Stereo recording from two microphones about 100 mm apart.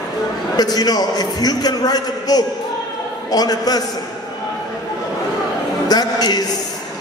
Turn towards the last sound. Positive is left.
turn(degrees=45)  # may be behind; listen again after turning